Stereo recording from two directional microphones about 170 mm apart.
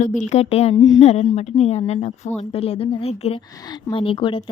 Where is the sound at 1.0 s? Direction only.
40° left (ahead or behind).